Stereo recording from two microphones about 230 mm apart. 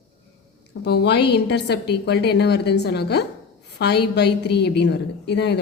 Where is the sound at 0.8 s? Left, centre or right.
Left.